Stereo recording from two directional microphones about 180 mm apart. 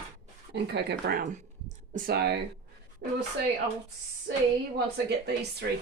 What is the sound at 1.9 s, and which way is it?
Speech, 50° right (ahead or behind).